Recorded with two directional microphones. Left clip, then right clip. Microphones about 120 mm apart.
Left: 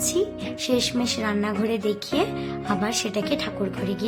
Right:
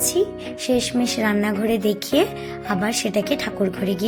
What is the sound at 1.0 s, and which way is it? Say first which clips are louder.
Speech: right 4 dB; 30° right (ahead or behind).